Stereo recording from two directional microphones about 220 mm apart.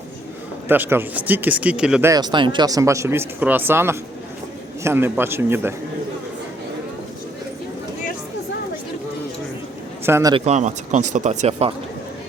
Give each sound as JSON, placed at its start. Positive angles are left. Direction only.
{"t": 0.7, "sound": "speech", "side_deg": -10}
{"t": 10.1, "sound": "speech", "side_deg": -10}
{"t": 10.3, "sound": "speech", "side_deg": -30}